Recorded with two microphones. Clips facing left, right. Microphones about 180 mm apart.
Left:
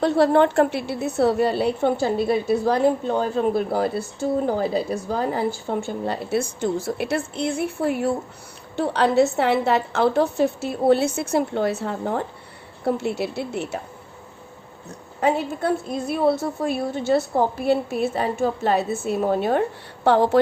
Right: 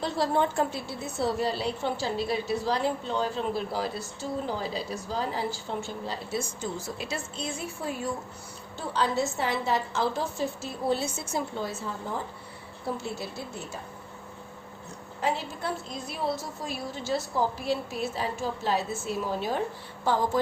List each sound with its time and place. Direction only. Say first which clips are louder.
0.0 s a woman's voice: left 10 dB; 65° left (ahead or behind)
15.2 s a woman's voice: left 9 dB; 60° left (ahead or behind)